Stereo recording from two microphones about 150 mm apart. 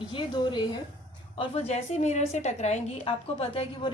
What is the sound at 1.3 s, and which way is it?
A woman's voice, 45° left (ahead or behind).